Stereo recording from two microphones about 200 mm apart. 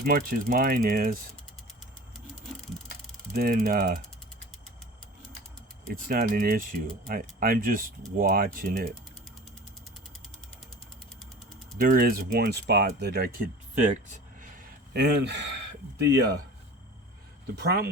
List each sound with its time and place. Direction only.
0.0 s speech: 45° right (ahead or behind)
3.3 s speech: 45° right (ahead or behind)
5.9 s speech: 45° right (ahead or behind)
11.8 s speech: 45° right (ahead or behind)
14.9 s speech: 55° right (ahead or behind)